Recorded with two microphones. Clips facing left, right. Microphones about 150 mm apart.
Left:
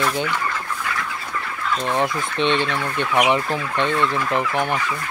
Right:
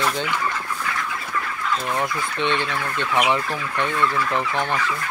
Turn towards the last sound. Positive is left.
turn(degrees=20)  # may be behind; listen again after turning